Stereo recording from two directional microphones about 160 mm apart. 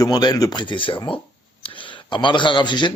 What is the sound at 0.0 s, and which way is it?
A man's voice, 25° left (ahead or behind).